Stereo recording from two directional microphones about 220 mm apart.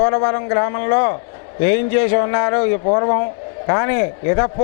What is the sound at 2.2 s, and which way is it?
Speech, 20° left (ahead or behind).